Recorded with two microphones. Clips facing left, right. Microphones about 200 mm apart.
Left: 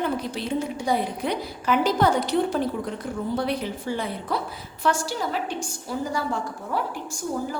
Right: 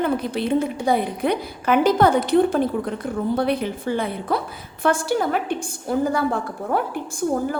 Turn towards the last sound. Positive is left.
turn(degrees=-55)  # may be behind; listen again after turning